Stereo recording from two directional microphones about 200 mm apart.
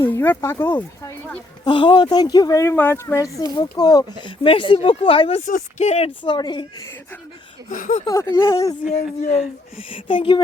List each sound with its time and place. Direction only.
0.0 s speech: 10° left (ahead or behind)
1.6 s speech: 25° left (ahead or behind)
5.5 s speech: 40° left (ahead or behind); by 7.2 s 10° left (ahead or behind)
7.7 s speech: 40° left (ahead or behind)
8.0 s speech: 15° left (ahead or behind)
9.7 s speech: 25° left (ahead or behind)